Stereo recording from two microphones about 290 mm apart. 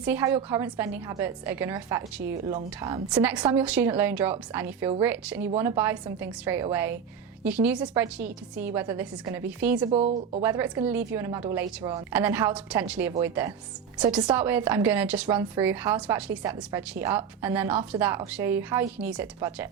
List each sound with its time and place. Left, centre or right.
0.0 s a woman's voice: centre
9.9 s speech: right
10.4 s a woman's voice: centre